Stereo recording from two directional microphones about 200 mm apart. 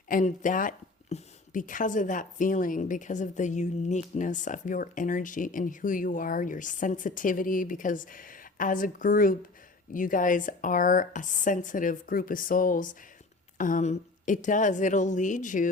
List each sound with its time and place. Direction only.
0.1 s speech: 40° left (ahead or behind)